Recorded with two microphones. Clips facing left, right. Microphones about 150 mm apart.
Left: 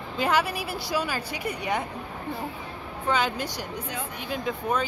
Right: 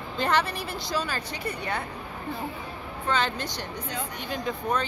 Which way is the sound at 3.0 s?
10° left (ahead or behind).